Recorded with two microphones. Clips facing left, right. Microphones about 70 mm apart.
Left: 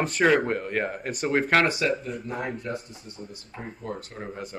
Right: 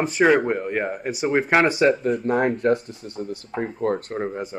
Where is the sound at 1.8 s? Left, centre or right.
Right.